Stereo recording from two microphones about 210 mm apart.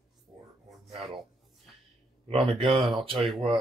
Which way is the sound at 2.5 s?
25° right (ahead or behind).